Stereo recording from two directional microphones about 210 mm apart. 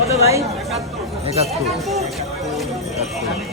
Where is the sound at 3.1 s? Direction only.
Centre (ahead or behind).